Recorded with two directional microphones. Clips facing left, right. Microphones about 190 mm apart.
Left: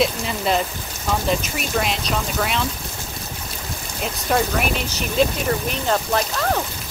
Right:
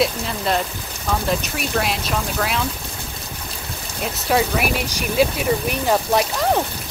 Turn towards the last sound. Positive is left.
turn(degrees=-15)  # may be behind; listen again after turning